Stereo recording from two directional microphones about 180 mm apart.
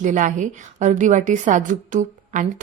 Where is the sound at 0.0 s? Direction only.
45° right (ahead or behind).